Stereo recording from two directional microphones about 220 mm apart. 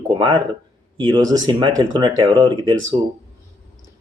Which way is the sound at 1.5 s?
20° right (ahead or behind).